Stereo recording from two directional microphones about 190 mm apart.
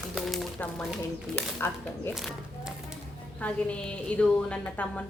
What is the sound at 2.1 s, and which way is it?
A woman's voice, centre (ahead or behind).